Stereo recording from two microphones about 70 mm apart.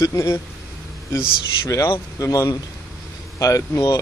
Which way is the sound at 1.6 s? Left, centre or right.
Left.